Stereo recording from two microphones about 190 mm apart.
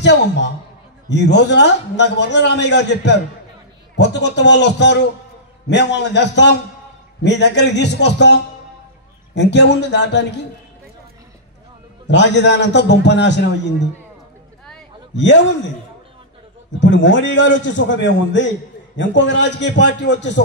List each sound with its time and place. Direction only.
0.0 s a man's voice: 65° left (ahead or behind)
12.1 s a man's voice: 65° left (ahead or behind)
15.1 s a man's voice: 70° left (ahead or behind)
16.8 s a man's voice: 75° left (ahead or behind)